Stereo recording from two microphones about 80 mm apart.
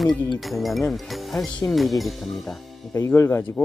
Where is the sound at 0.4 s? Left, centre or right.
Centre.